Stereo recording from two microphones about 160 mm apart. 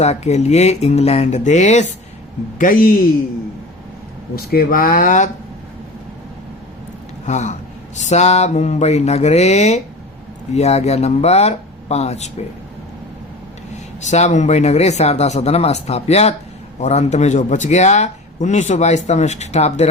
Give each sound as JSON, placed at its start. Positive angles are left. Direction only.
{"t": 0.0, "sound": "a man's voice", "side_deg": 45}
{"t": 2.6, "sound": "speech", "side_deg": 55}
{"t": 4.5, "sound": "speech", "side_deg": 65}
{"t": 7.3, "sound": "a man's voice", "side_deg": 45}
{"t": 14.0, "sound": "a man's voice", "side_deg": 45}